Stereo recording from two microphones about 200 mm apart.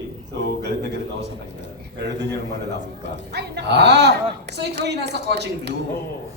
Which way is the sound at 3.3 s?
55° right (ahead or behind).